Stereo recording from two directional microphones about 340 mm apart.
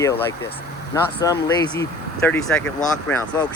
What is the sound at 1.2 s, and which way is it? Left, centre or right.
Speech, centre.